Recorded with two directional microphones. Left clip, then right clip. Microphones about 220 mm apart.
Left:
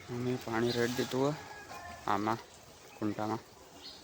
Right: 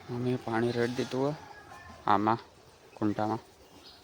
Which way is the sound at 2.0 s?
20° right (ahead or behind).